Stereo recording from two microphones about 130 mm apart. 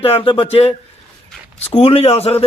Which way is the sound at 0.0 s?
45° left (ahead or behind).